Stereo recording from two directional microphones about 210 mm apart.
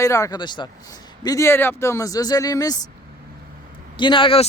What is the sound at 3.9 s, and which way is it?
Speech, 20° left (ahead or behind).